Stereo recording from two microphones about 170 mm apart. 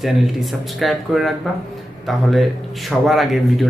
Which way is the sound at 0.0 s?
Centre (ahead or behind).